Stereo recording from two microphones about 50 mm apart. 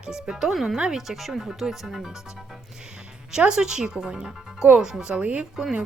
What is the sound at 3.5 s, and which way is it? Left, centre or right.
Speech, centre.